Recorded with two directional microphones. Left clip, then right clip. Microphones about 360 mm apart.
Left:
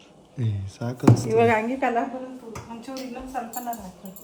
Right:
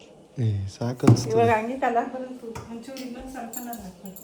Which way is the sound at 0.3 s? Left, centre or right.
Centre.